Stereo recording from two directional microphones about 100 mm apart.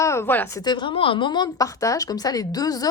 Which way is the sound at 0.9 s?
65° left (ahead or behind).